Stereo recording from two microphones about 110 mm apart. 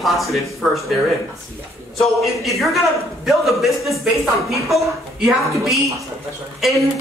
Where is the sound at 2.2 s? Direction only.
Centre (ahead or behind).